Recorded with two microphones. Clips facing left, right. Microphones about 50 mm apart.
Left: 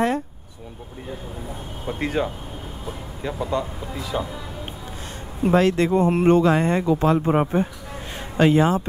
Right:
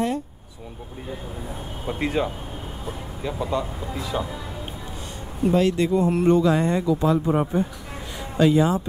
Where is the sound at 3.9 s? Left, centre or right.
Right.